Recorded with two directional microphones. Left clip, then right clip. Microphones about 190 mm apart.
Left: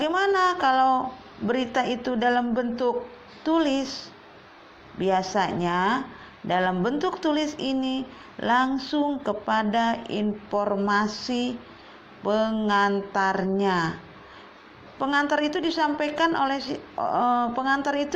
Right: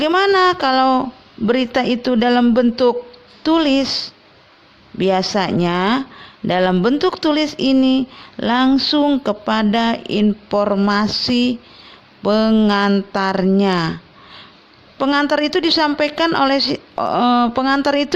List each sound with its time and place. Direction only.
0.0 s speech: 50° right (ahead or behind)
8.7 s speech: 60° right (ahead or behind)
12.2 s speech: 55° right (ahead or behind)
14.9 s speech: 50° right (ahead or behind)
17.0 s speech: 45° right (ahead or behind)